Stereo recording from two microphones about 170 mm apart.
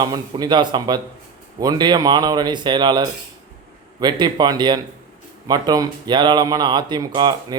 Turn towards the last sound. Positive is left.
turn(degrees=-25)  # may be behind; listen again after turning